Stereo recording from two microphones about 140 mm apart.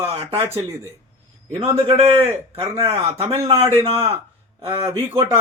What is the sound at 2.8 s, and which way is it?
Speech, 45° right (ahead or behind).